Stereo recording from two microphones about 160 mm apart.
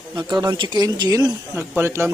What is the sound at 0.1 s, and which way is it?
Speech, 25° right (ahead or behind).